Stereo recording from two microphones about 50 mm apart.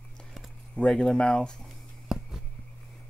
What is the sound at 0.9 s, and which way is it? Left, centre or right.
Speech, centre.